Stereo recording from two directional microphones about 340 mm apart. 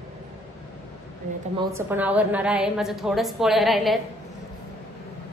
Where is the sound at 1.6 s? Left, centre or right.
Centre.